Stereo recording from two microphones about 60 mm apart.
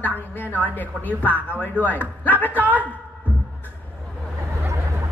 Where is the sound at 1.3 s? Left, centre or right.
Right.